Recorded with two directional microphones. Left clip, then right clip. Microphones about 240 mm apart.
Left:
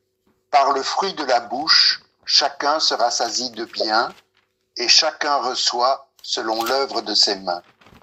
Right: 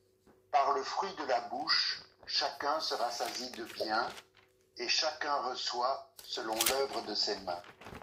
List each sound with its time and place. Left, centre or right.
0.5 s speech: left